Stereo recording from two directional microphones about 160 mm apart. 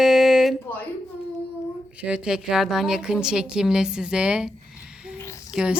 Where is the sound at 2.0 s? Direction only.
5° right (ahead or behind).